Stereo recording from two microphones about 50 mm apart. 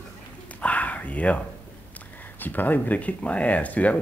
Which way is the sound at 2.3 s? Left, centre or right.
Left.